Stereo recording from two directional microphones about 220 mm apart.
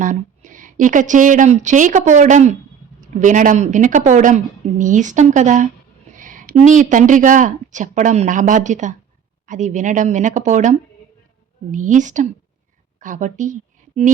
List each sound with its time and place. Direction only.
0.0 s a woman's voice: 35° right (ahead or behind)